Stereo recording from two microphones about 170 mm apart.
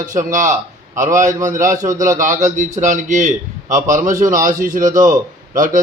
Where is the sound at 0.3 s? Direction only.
50° right (ahead or behind).